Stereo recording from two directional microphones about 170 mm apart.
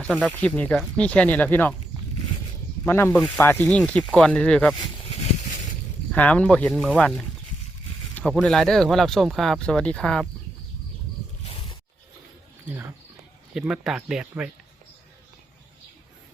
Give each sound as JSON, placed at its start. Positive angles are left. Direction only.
{"t": 0.0, "sound": "speech", "side_deg": 10}
{"t": 2.8, "sound": "speech", "side_deg": 15}
{"t": 6.1, "sound": "speech", "side_deg": 10}
{"t": 12.6, "sound": "speech", "side_deg": -10}